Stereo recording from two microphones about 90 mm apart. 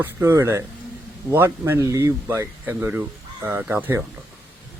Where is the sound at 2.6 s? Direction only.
20° right (ahead or behind).